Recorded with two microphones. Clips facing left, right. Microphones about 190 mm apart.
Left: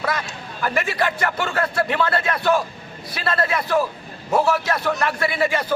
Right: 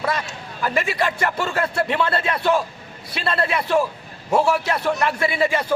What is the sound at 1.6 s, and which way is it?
A man's voice, 25° right (ahead or behind).